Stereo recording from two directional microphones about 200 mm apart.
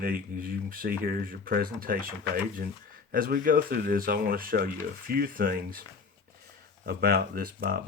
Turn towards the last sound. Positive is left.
turn(degrees=-45)  # may be behind; listen again after turning